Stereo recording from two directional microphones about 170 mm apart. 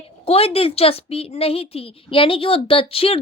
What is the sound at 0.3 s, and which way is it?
A woman's voice, 35° left (ahead or behind).